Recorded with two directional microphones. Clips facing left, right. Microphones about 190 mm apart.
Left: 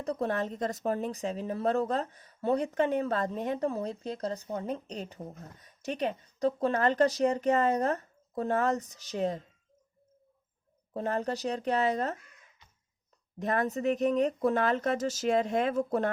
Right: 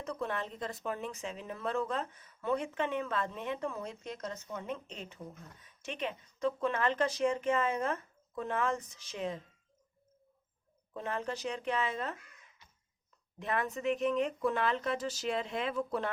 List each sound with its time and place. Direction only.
0.0 s speech: 35° left (ahead or behind)
10.9 s speech: 40° left (ahead or behind)
13.4 s speech: 40° left (ahead or behind)